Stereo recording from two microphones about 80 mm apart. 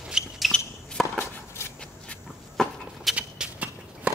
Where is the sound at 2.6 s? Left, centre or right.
Centre.